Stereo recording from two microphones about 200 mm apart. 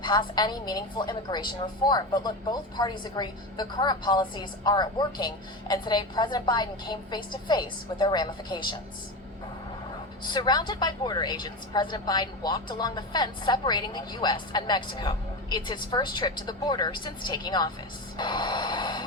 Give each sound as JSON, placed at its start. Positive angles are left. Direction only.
{"t": 0.0, "sound": "a woman's voice", "side_deg": 25}
{"t": 10.2, "sound": "a woman's voice", "side_deg": 20}
{"t": 18.2, "sound": "gasp", "side_deg": 20}